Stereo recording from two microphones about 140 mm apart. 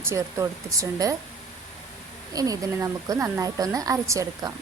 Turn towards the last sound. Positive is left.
turn(degrees=-25)  # may be behind; listen again after turning